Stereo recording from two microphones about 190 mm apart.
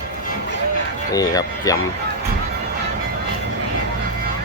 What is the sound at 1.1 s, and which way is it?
Speech, 20° left (ahead or behind).